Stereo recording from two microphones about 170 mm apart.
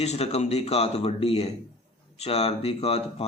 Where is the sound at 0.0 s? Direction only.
40° left (ahead or behind).